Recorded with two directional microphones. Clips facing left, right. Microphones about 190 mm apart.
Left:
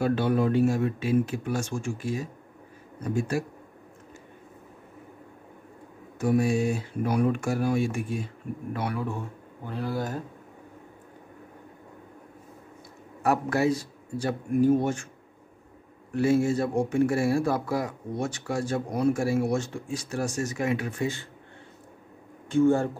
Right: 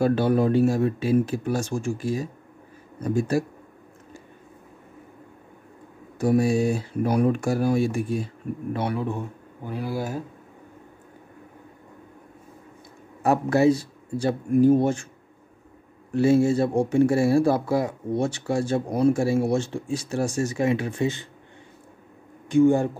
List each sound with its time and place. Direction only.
0.0 s speech: 40° right (ahead or behind)
6.1 s speech: 35° right (ahead or behind)
8.7 s speech: 25° right (ahead or behind)
9.7 s speech: 10° right (ahead or behind)
13.2 s speech: 25° right (ahead or behind)
16.1 s speech: 30° right (ahead or behind)
22.5 s speech: 15° right (ahead or behind)